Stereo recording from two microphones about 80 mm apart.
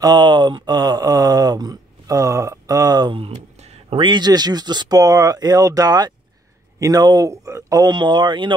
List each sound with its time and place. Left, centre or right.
0.0 s a sound: right
4.0 s speech: right
7.9 s speech: right